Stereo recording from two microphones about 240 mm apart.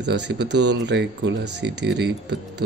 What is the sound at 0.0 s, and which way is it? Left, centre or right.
Speech, right.